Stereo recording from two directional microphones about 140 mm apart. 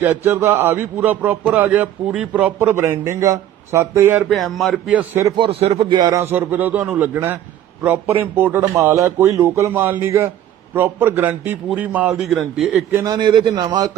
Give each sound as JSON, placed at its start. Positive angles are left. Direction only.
{"t": 0.0, "sound": "speech", "side_deg": -15}
{"t": 4.3, "sound": "a man's voice", "side_deg": 0}
{"t": 4.9, "sound": "speech", "side_deg": -10}
{"t": 5.4, "sound": "speech", "side_deg": -45}
{"t": 6.0, "sound": "a man's voice", "side_deg": -20}
{"t": 13.1, "sound": "a man's voice", "side_deg": -30}